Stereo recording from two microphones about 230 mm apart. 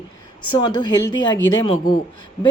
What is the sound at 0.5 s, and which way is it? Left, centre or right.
Speech, centre.